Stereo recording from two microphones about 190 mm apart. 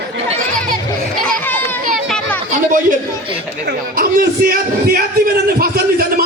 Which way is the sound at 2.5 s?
45° right (ahead or behind).